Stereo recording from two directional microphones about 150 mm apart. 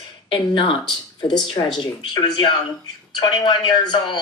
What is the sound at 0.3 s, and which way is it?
Speech, 35° left (ahead or behind).